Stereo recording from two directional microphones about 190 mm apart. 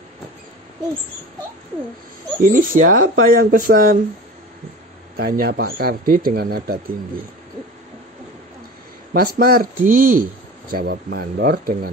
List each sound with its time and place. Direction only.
2.4 s speech: 45° right (ahead or behind)
5.1 s speech: 50° right (ahead or behind)
9.1 s speech: 50° right (ahead or behind)